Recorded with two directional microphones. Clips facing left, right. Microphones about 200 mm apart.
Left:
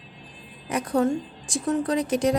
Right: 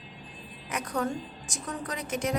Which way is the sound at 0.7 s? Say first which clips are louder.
Left 8 dB; 30° left (ahead or behind).